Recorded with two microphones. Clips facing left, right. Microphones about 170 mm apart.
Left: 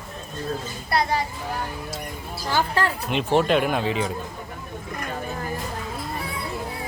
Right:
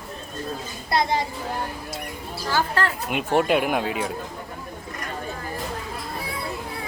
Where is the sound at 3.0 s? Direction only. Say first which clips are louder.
Left 1 dB; 10° right (ahead or behind).